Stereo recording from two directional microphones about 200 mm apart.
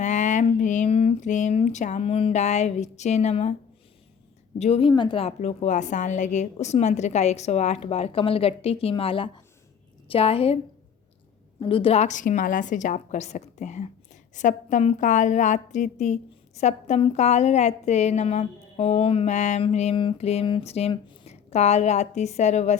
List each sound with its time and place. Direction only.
0.0 s a sound: 40° left (ahead or behind)
4.5 s a woman's voice: 30° left (ahead or behind)
11.6 s a woman's voice: 25° left (ahead or behind)